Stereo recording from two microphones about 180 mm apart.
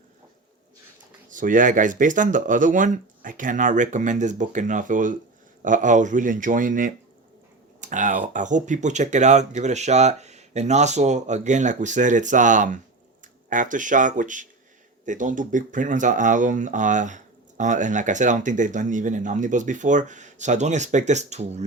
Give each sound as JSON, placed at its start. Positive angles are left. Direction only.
{"t": 1.3, "sound": "speech", "side_deg": -45}